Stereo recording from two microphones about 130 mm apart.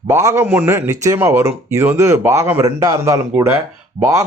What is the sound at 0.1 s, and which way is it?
Speech, 20° right (ahead or behind).